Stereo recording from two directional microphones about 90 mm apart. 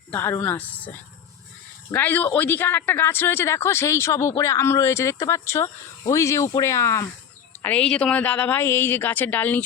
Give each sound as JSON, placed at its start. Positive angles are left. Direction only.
{"t": 0.1, "sound": "a woman's voice", "side_deg": 25}
{"t": 1.9, "sound": "speech", "side_deg": 20}
{"t": 7.6, "sound": "a woman's voice", "side_deg": 15}